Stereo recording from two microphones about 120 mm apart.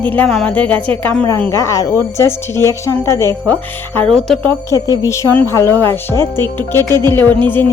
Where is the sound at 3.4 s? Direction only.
10° left (ahead or behind).